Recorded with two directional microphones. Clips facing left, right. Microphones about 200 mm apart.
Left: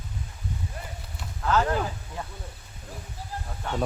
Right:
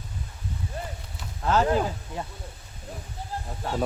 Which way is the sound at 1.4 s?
25° right (ahead or behind).